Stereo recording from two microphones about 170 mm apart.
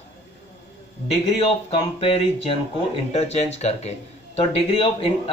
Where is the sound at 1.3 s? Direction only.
35° left (ahead or behind).